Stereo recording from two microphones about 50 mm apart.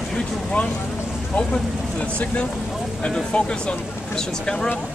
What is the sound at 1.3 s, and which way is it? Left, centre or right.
Speech, left.